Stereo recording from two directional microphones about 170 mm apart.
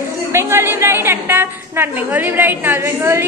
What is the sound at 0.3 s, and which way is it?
A woman's voice, 15° right (ahead or behind).